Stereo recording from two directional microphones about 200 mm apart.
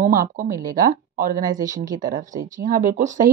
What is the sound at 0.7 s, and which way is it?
Speech, 45° right (ahead or behind).